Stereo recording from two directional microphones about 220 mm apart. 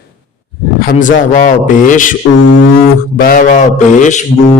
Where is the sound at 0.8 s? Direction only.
40° left (ahead or behind).